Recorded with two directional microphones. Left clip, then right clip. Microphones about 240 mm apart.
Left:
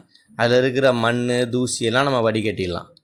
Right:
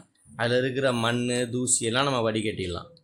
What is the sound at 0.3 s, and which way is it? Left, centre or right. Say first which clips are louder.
A man's voice: left 8 dB; left.